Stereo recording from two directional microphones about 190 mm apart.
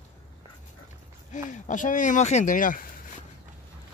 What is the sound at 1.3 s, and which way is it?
Speech, 40° left (ahead or behind).